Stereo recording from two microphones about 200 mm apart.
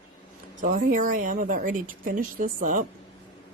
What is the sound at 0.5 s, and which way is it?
Speech, 40° right (ahead or behind).